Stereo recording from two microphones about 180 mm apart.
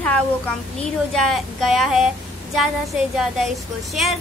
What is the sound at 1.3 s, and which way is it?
Speech, centre (ahead or behind).